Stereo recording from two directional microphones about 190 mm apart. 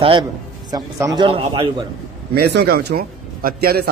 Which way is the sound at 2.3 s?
55° right (ahead or behind).